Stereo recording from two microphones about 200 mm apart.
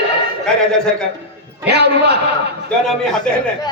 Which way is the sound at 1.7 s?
55° right (ahead or behind).